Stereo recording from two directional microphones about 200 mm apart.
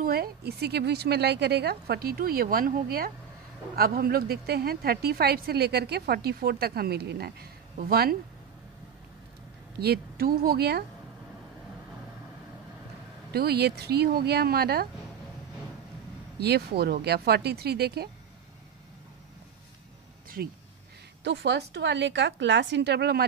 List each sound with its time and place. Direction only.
0.0 s a woman's voice: 50° right (ahead or behind)
9.8 s a woman's voice: 50° right (ahead or behind)
13.3 s a woman's voice: 50° right (ahead or behind)
16.3 s a woman's voice: 55° right (ahead or behind)
20.4 s a woman's voice: 50° right (ahead or behind)